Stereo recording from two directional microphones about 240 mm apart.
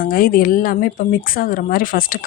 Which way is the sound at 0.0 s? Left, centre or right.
Left.